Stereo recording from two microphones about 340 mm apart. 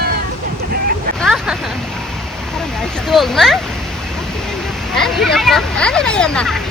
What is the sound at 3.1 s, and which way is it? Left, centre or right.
Speech, centre.